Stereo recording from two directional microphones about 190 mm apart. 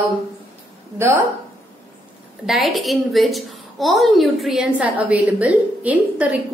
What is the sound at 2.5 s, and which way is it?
A woman's voice, centre (ahead or behind).